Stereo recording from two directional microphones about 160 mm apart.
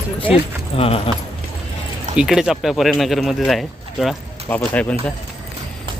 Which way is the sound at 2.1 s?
5° right (ahead or behind).